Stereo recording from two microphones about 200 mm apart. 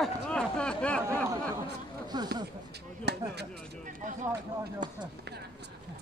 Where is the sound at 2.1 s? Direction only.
20° right (ahead or behind).